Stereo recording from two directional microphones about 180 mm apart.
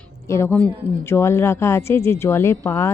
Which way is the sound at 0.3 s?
15° left (ahead or behind).